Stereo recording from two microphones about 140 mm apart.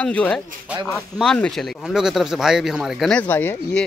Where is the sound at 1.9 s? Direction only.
5° right (ahead or behind).